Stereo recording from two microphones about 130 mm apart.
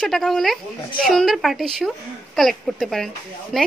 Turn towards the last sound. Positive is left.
turn(degrees=0)  # may be behind; listen again after turning